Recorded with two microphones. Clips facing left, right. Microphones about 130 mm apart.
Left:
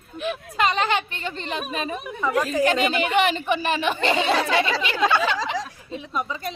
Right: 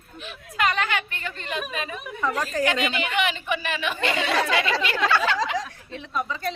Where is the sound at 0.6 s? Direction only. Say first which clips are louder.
Left 2 dB; 25° left (ahead or behind).